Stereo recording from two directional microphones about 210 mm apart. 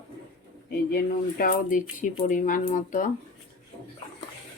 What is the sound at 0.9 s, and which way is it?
Speech, 40° left (ahead or behind).